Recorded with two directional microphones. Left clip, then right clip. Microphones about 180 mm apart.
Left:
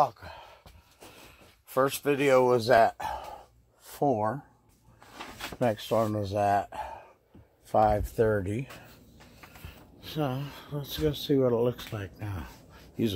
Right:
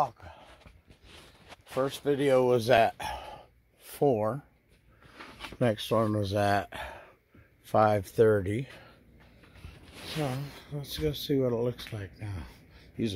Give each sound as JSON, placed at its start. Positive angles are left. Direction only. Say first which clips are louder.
{"t": 2.0, "sound": "speech", "louder": "left 1 dB", "side_deg": -30}
{"t": 5.6, "sound": "speech", "louder": "left 1 dB", "side_deg": -35}
{"t": 9.7, "sound": "speech", "louder": "right 4 dB", "side_deg": -5}